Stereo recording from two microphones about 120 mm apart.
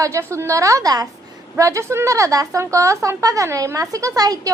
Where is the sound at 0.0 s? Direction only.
25° right (ahead or behind).